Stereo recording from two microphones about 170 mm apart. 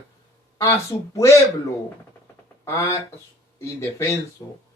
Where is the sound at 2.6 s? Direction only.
15° left (ahead or behind).